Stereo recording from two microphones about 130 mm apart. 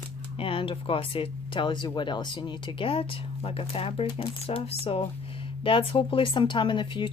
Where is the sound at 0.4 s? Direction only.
45° left (ahead or behind).